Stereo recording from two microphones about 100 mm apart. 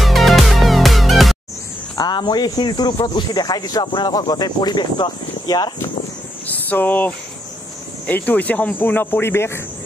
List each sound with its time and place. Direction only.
0.0 s music: centre (ahead or behind)
2.0 s speech: 45° left (ahead or behind)
6.7 s speech: 20° left (ahead or behind)